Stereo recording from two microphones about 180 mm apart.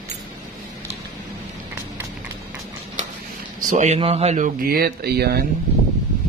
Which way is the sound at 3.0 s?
40° right (ahead or behind).